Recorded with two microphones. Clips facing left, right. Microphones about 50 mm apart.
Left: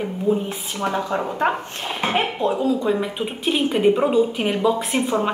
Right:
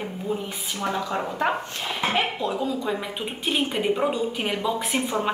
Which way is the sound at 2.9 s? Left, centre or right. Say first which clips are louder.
Left 6 dB; centre.